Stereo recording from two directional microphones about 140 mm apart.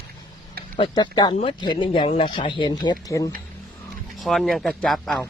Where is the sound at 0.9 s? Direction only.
30° left (ahead or behind).